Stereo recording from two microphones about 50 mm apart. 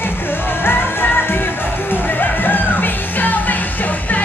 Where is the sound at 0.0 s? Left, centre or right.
Left.